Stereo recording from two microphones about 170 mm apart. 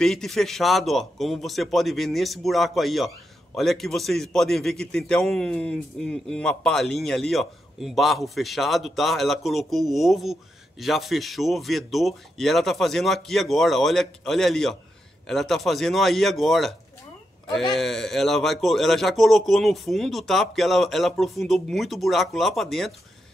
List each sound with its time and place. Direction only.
0.0 s a man's voice: centre (ahead or behind)
17.7 s a man's voice: centre (ahead or behind)